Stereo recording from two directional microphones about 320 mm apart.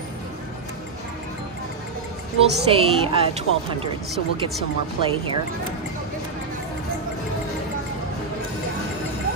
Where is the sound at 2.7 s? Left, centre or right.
Centre.